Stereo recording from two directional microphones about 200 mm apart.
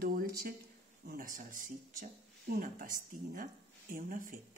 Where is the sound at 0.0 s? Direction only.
45° right (ahead or behind).